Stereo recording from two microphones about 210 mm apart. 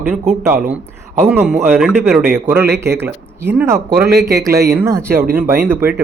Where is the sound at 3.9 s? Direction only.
50° right (ahead or behind).